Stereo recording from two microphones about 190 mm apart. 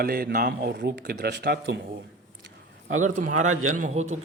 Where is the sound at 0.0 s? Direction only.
50° right (ahead or behind).